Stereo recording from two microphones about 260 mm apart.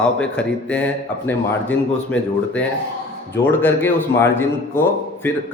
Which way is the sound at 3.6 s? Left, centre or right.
Centre.